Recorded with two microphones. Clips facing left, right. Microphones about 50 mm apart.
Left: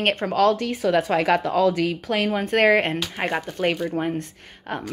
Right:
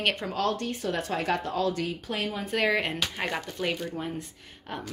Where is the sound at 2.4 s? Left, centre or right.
Left.